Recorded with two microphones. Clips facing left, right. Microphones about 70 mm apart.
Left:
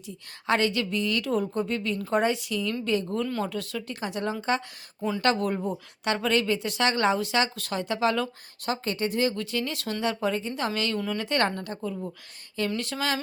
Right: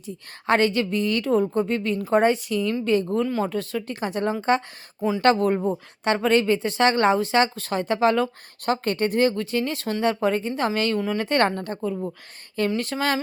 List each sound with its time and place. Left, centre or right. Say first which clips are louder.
0.4 s speech: right 5 dB; right
10.9 s speech: right 5 dB; right
11.2 s speech: right 4 dB; right